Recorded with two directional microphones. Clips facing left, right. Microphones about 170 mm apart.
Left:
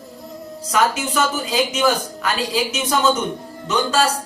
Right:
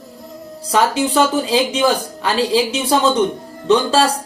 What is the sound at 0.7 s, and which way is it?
A man's voice, 30° right (ahead or behind).